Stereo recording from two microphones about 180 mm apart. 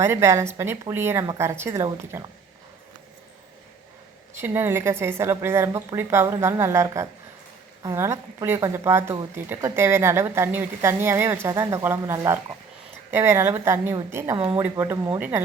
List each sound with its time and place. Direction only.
0.0 s a woman's voice: 15° right (ahead or behind)
4.4 s a woman's voice: 10° right (ahead or behind)